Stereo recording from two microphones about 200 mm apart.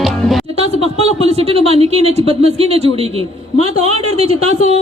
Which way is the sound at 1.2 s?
30° right (ahead or behind).